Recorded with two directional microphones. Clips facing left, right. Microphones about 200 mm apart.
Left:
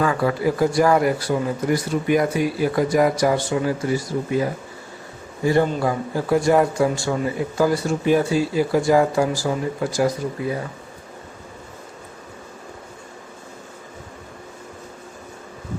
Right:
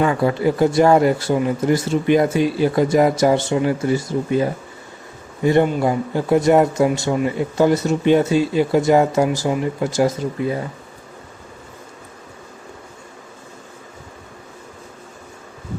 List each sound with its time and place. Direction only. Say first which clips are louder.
0.0 s speech: right 3 dB; 25° right (ahead or behind)